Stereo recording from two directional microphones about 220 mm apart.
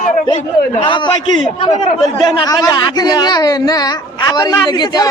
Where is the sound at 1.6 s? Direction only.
30° left (ahead or behind).